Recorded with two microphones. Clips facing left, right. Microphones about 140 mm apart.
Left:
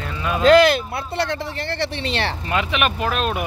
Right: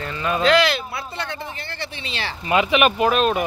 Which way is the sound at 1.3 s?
70° left (ahead or behind).